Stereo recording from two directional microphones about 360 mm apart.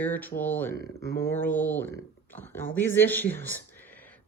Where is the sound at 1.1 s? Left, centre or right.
Centre.